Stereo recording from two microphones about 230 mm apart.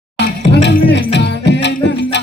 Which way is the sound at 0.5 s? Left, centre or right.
Left.